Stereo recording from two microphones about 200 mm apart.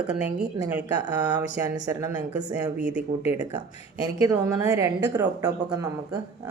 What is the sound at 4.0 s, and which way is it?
A woman's voice, 15° right (ahead or behind).